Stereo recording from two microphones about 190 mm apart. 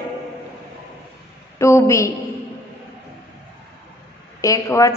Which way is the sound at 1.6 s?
15° left (ahead or behind).